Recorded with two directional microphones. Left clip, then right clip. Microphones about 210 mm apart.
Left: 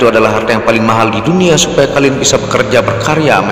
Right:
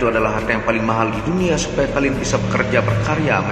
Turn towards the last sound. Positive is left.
turn(degrees=50)  # may be behind; listen again after turning